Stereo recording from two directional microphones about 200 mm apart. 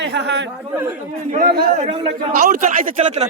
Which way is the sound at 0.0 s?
60° right (ahead or behind).